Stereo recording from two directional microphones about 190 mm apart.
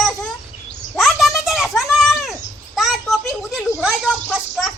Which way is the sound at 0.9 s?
Centre (ahead or behind).